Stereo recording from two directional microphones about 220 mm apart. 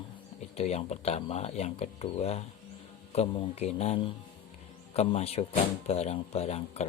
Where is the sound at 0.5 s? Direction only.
30° left (ahead or behind).